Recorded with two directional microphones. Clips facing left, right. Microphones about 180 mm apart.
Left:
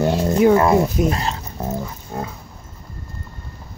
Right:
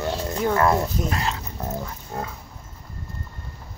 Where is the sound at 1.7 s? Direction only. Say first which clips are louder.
Left 4 dB; 10° left (ahead or behind).